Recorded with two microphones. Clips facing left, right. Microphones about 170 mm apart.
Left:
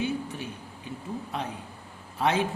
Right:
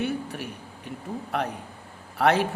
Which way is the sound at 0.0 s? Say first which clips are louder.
Right 1 dB; 65° right (ahead or behind).